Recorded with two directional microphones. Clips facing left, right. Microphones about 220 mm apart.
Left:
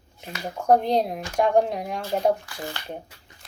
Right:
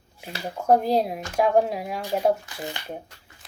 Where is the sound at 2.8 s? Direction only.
20° right (ahead or behind).